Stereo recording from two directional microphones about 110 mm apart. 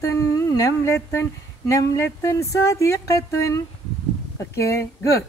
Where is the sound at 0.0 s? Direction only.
30° left (ahead or behind).